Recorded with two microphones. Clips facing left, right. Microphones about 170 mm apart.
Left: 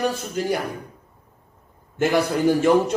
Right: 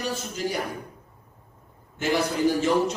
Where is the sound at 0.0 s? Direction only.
55° left (ahead or behind).